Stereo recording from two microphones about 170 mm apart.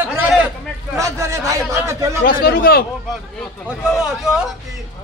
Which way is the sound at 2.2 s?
60° left (ahead or behind).